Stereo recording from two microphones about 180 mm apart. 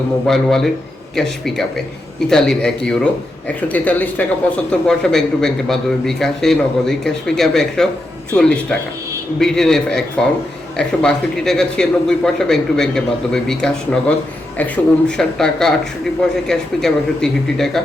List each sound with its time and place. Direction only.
0.3 s speech: centre (ahead or behind)